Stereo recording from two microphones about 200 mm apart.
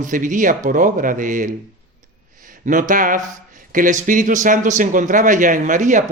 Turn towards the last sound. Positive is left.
turn(degrees=-40)  # may be behind; listen again after turning